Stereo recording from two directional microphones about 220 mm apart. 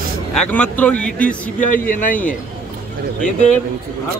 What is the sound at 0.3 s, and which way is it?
Speech, 5° left (ahead or behind).